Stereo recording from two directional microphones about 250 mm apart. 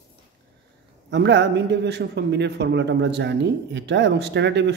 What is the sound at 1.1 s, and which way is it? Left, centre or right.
A man's voice, right.